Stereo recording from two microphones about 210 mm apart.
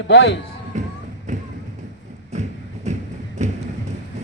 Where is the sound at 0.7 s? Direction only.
35° right (ahead or behind).